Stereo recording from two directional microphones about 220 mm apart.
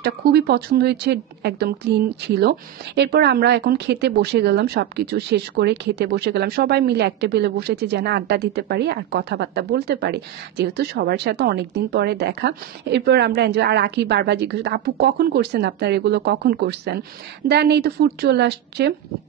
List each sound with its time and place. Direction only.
0.0 s a woman's voice: 45° right (ahead or behind)